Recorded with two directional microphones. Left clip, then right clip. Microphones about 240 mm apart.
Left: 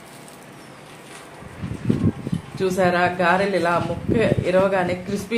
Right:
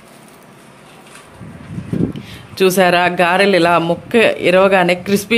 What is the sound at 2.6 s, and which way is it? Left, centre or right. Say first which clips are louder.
A man's voice: right 8 dB; right.